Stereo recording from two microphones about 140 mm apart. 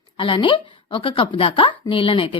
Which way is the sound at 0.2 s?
35° left (ahead or behind).